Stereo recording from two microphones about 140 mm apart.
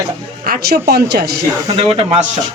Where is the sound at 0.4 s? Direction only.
90° right.